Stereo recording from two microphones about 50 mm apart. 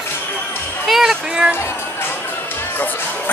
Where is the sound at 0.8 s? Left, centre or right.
Centre.